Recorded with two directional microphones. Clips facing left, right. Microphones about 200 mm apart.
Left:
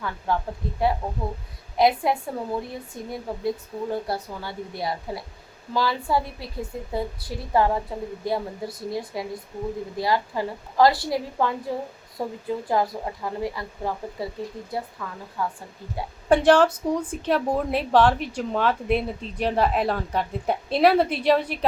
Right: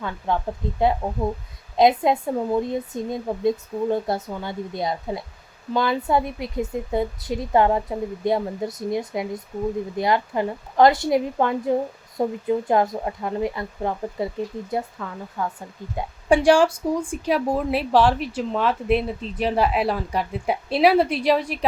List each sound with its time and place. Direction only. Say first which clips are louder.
0.3 s a woman's voice: right 2 dB; 20° right (ahead or behind)
16.0 s speech: right 1 dB; 10° right (ahead or behind)